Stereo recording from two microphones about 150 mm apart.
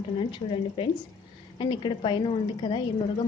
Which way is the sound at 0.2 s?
35° left (ahead or behind).